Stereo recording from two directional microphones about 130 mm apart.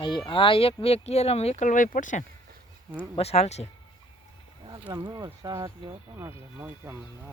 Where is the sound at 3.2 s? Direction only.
55° left (ahead or behind).